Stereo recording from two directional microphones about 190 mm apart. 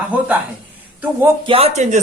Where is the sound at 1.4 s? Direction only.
30° right (ahead or behind).